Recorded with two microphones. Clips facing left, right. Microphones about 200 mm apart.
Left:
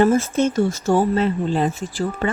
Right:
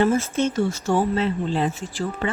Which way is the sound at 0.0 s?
45° left (ahead or behind).